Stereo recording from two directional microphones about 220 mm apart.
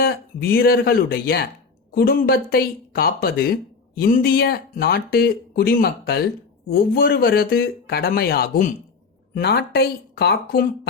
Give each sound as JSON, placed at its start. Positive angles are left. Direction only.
{"t": 0.0, "sound": "speech", "side_deg": 45}